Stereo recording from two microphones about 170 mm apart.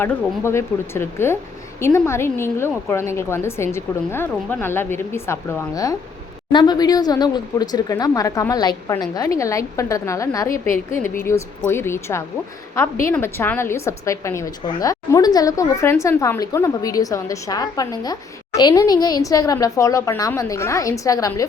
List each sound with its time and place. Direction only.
0.0 s a woman's voice: 15° left (ahead or behind)
10.5 s a woman's voice: 50° left (ahead or behind)
11.2 s a woman's voice: 15° left (ahead or behind)